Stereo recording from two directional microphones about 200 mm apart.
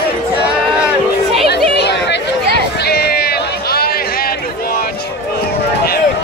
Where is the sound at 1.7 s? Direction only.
60° left (ahead or behind).